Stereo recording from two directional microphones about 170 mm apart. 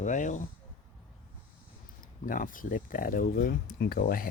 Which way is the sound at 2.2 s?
55° left (ahead or behind).